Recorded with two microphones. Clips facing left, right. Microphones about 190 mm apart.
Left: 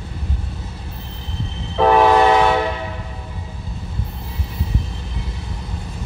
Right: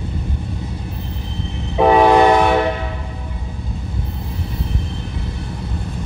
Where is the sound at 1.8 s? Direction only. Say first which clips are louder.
Right 2 dB; 15° right (ahead or behind).